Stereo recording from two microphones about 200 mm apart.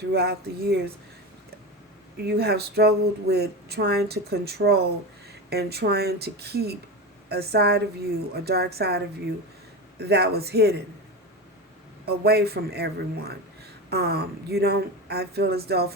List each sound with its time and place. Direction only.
0.1 s speech: 55° right (ahead or behind)
2.1 s speech: 55° right (ahead or behind)
12.0 s speech: 50° right (ahead or behind)